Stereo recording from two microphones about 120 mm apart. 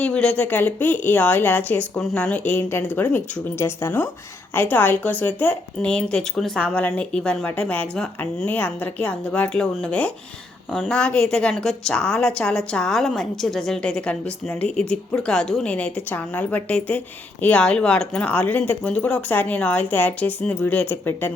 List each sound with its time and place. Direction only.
0.0 s a woman's voice: 10° left (ahead or behind)